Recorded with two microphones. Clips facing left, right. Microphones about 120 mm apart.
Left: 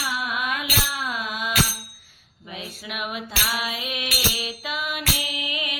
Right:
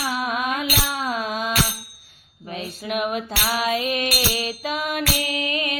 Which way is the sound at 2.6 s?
40° right (ahead or behind).